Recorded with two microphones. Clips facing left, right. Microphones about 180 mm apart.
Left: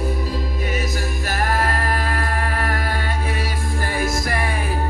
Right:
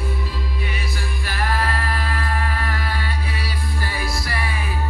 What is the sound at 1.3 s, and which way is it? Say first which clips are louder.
Singing: left 2 dB; 45° left (ahead or behind).